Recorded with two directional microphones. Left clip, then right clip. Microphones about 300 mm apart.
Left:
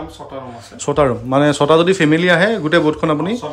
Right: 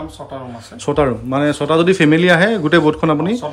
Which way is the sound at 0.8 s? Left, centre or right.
Centre.